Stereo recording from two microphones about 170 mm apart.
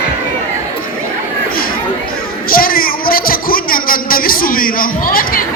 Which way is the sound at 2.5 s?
60° left (ahead or behind).